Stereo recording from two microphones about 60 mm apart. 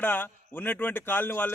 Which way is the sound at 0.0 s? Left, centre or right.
Left.